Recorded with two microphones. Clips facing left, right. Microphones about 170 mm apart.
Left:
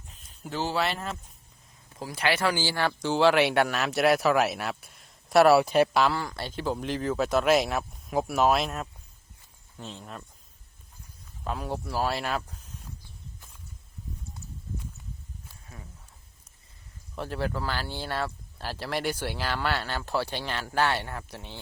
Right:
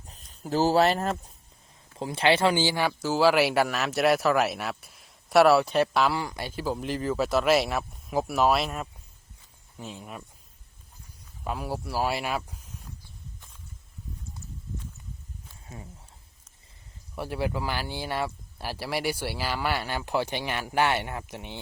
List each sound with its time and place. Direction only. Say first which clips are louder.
0.4 s speech: right 7 dB; 40° right (ahead or behind)
2.0 s speech: right 4 dB; 25° right (ahead or behind); by 6.1 s centre (ahead or behind)
6.1 s speech: right 1 dB; 10° right (ahead or behind)
11.4 s speech: even; 5° right (ahead or behind)
15.6 s speech: right 5 dB; 25° right (ahead or behind)
17.2 s speech: right 1 dB; 10° right (ahead or behind)